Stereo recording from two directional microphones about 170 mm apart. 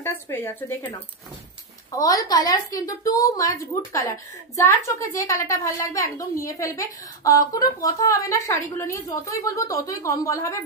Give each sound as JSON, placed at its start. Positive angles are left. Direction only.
{"t": 0.0, "sound": "a woman's voice", "side_deg": 10}